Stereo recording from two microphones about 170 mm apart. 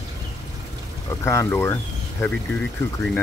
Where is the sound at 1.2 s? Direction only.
15° left (ahead or behind).